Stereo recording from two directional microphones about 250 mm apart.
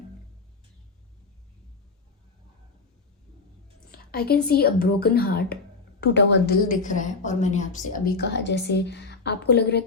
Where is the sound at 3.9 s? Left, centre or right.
Left.